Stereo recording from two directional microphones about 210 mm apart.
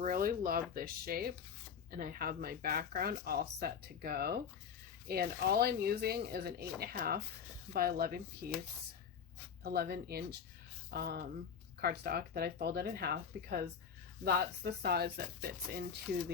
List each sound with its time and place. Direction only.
0.0 s speech: 45° right (ahead or behind)
9.6 s speech: 45° right (ahead or behind)